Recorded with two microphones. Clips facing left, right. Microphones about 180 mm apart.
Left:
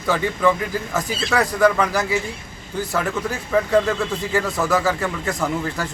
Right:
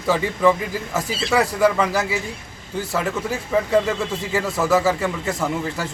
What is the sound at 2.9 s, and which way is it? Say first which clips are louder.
Speech: even; 5° right (ahead or behind).